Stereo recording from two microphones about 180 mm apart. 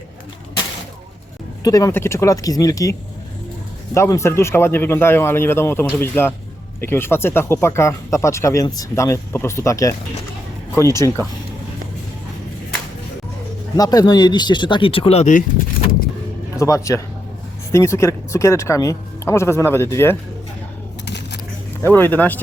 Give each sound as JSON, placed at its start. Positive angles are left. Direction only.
{"t": 1.6, "sound": "speech", "side_deg": 20}
{"t": 3.9, "sound": "speech", "side_deg": 15}
{"t": 13.7, "sound": "speech", "side_deg": 20}
{"t": 16.6, "sound": "speech", "side_deg": 15}
{"t": 21.8, "sound": "speech", "side_deg": 10}